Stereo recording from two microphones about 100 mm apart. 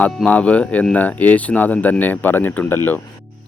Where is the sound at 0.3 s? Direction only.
15° left (ahead or behind).